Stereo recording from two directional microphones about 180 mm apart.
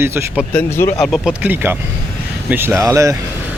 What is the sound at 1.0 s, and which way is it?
Speech, centre (ahead or behind).